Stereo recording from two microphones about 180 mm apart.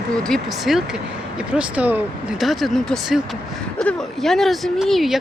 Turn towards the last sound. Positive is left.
turn(degrees=0)  # may be behind; listen again after turning